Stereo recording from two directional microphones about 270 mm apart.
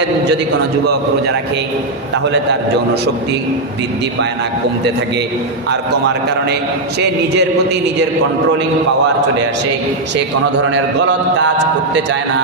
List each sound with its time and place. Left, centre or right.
7.0 s a man's voice: right
10.7 s a man's voice: right